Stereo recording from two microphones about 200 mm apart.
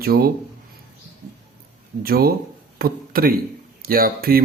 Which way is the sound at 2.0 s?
50° right (ahead or behind).